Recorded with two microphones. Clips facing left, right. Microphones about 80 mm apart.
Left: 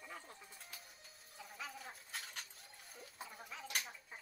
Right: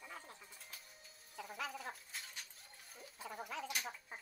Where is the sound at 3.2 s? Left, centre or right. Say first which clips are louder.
Right 7 dB; right.